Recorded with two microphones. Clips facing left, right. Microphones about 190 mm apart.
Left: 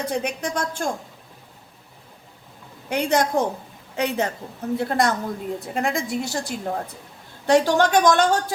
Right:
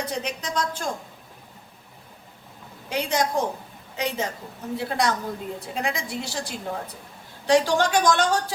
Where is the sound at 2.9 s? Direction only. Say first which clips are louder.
Left 4 dB; 60° left (ahead or behind).